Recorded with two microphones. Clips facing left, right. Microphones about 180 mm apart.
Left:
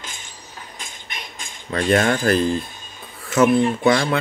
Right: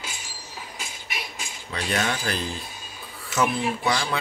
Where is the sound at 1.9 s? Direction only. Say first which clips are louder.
Left 10 dB; 50° left (ahead or behind).